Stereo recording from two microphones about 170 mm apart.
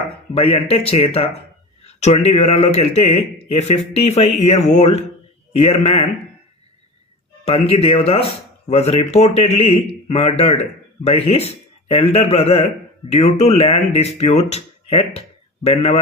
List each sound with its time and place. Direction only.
0.3 s speech: 35° left (ahead or behind)
7.4 s speech: 35° left (ahead or behind)